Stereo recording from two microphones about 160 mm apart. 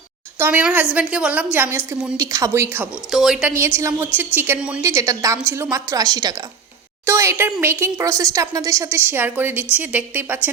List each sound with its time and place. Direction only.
0.3 s speech: 10° right (ahead or behind)
3.1 s speech: centre (ahead or behind)
3.8 s speech: 15° right (ahead or behind)